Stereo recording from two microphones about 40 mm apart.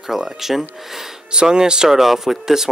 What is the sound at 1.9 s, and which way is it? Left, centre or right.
Speech, centre.